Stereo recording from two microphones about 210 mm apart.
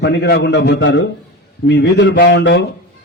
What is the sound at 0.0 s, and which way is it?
A man's voice, 55° left (ahead or behind).